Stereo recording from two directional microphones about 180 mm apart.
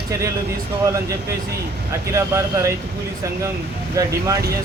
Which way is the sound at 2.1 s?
15° right (ahead or behind).